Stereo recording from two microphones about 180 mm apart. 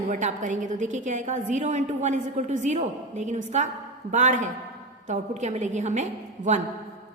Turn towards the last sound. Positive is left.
turn(degrees=-40)  # may be behind; listen again after turning